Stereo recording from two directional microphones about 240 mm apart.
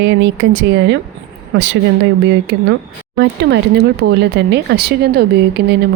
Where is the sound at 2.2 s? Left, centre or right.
Right.